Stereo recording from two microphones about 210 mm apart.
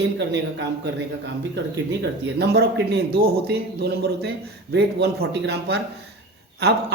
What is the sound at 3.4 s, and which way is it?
Speech, 50° right (ahead or behind).